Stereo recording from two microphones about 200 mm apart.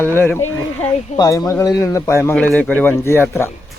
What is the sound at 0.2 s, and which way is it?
Speech, 10° left (ahead or behind).